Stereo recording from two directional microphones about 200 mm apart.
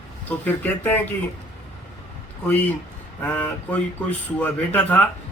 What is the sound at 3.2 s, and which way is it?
Speech, 10° left (ahead or behind).